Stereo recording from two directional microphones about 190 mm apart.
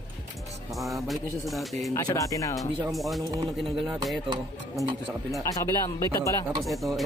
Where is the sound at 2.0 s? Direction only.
20° left (ahead or behind).